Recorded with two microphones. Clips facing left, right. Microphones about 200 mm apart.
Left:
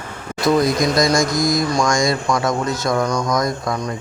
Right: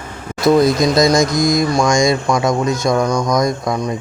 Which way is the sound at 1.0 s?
20° right (ahead or behind).